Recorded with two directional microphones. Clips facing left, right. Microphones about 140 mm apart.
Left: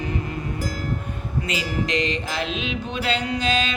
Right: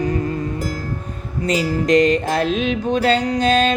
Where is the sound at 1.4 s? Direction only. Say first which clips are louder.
Right 9 dB; 45° right (ahead or behind).